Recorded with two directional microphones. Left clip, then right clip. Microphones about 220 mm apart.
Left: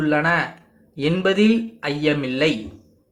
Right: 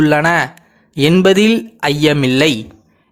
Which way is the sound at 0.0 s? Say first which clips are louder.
Right 7 dB; 45° right (ahead or behind).